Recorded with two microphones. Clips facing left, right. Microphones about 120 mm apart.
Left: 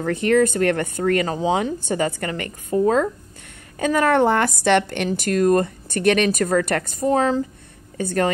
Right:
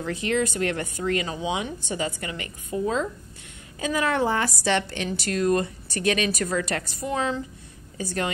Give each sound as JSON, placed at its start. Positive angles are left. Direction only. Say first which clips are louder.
{"t": 0.0, "sound": "a woman's voice", "louder": "left 8 dB", "side_deg": 55}
{"t": 8.0, "sound": "a woman's voice", "louder": "left 7 dB", "side_deg": 55}